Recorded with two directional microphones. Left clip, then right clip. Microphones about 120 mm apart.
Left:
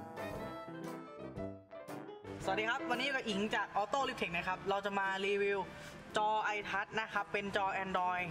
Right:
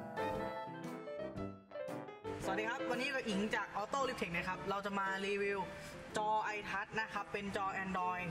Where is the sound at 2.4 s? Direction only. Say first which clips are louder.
Left 3 dB; 40° left (ahead or behind).